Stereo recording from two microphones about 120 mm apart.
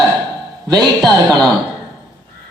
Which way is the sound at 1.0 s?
30° right (ahead or behind).